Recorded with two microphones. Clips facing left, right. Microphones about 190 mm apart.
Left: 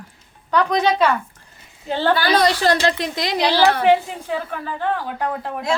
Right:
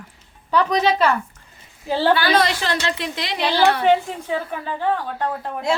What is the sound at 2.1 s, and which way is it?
A woman's voice, 40° left (ahead or behind).